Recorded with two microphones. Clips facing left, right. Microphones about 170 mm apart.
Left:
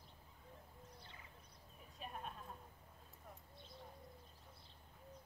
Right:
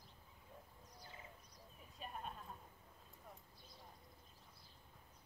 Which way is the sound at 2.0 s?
Centre (ahead or behind).